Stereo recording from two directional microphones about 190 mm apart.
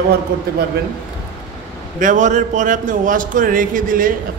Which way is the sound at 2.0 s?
40° right (ahead or behind).